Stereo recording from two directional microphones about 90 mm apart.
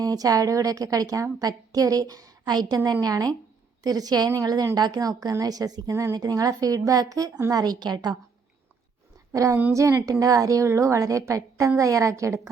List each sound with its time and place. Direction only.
0.0 s a woman's voice: 40° right (ahead or behind)
9.3 s a woman's voice: 35° right (ahead or behind)